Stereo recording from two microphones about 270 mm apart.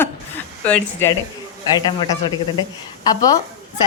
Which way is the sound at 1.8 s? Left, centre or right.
Centre.